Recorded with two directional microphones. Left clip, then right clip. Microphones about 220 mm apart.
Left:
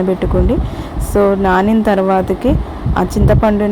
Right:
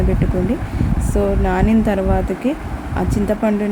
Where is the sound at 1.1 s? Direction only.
15° left (ahead or behind).